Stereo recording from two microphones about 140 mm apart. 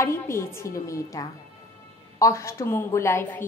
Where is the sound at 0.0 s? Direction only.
20° left (ahead or behind).